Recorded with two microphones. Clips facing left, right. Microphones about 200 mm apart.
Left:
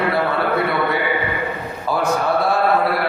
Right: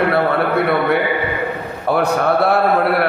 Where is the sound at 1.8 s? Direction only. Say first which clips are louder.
Right 4 dB; 65° right (ahead or behind).